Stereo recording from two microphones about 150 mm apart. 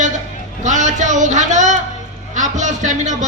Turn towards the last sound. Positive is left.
turn(degrees=-55)  # may be behind; listen again after turning